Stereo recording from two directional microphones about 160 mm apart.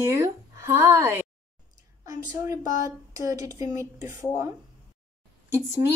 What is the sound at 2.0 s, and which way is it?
A woman's voice, 20° right (ahead or behind).